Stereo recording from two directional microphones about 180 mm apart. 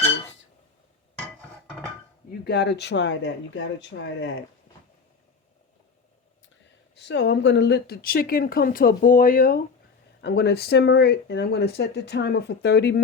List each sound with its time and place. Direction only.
2.4 s speech: 65° left (ahead or behind); by 4.4 s 90° left
7.0 s a woman's voice: 80° left; by 9.6 s 50° left (ahead or behind)
10.2 s speech: 70° left (ahead or behind)